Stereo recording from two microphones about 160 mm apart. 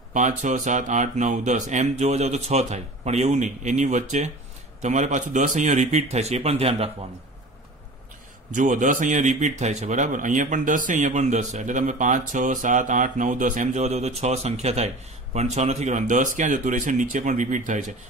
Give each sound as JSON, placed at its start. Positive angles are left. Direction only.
{"t": 0.1, "sound": "a man's voice", "side_deg": -50}
{"t": 8.5, "sound": "a man's voice", "side_deg": -50}